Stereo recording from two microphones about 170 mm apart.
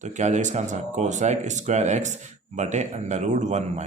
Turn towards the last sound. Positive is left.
turn(degrees=-45)  # may be behind; listen again after turning